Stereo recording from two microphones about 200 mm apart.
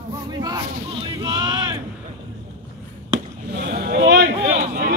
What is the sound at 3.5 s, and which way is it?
Vehicle, 50° right (ahead or behind).